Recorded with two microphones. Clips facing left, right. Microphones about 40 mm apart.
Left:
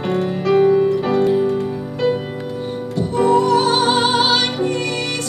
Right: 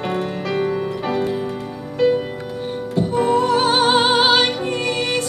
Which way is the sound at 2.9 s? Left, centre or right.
Centre.